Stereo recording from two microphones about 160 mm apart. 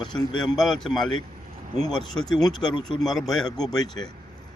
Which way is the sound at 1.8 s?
25° left (ahead or behind).